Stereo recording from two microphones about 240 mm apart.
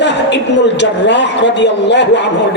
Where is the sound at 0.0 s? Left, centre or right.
Left.